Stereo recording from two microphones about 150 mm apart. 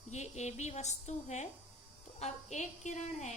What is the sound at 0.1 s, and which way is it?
A woman's voice, 50° left (ahead or behind).